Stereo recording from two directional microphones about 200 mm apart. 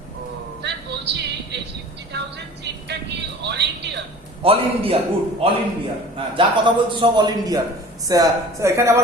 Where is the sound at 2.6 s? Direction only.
60° right (ahead or behind).